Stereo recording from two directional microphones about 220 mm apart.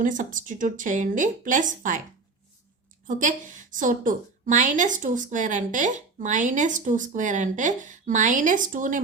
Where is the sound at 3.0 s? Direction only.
35° right (ahead or behind).